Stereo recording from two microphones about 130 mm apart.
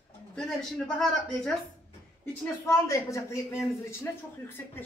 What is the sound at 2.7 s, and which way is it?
A woman's voice, 25° left (ahead or behind).